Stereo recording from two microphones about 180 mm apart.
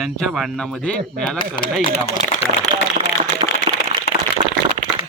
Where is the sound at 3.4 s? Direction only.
40° right (ahead or behind).